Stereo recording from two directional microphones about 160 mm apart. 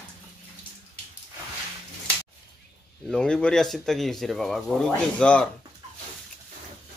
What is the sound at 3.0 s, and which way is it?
Speech, 5° left (ahead or behind).